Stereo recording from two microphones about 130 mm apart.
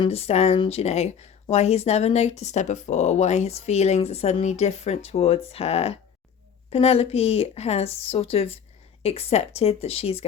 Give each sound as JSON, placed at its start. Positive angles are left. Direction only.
{"t": 0.0, "sound": "a woman's voice", "side_deg": 50}